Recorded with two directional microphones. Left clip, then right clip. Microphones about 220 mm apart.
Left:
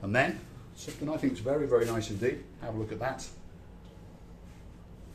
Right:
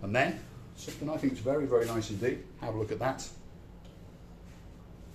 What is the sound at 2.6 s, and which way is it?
Speech, 25° right (ahead or behind).